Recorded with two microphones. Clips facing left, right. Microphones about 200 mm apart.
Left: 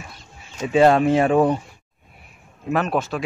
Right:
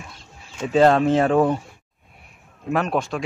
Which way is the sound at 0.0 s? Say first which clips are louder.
Left 1 dB; centre (ahead or behind).